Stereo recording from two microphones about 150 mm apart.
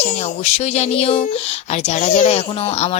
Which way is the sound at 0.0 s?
45° left (ahead or behind).